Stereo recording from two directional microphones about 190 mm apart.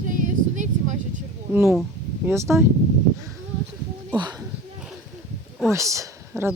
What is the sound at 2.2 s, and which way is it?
Speech, 15° right (ahead or behind).